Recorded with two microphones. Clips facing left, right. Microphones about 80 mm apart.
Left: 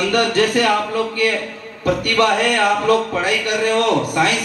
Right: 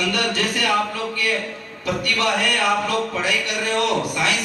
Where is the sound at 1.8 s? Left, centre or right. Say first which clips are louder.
Left 6 dB; left.